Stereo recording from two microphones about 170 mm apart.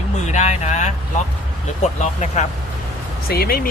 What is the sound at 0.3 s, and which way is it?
Speech, 45° left (ahead or behind).